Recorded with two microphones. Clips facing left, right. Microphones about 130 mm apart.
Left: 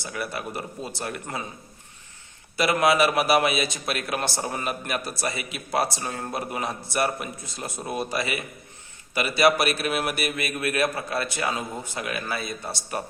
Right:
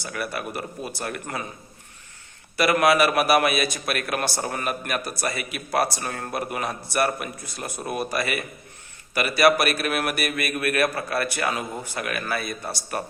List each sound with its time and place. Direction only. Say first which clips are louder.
0.0 s speech: right 1 dB; 25° left (ahead or behind)
2.6 s a man's voice: right 2 dB; 20° left (ahead or behind)
5.3 s speech: right 2 dB; 55° right (ahead or behind)
5.5 s speech: right 2 dB; 25° left (ahead or behind)
9.6 s a man's voice: right 1 dB; 50° right (ahead or behind)
10.3 s speech: right 2 dB; 25° left (ahead or behind)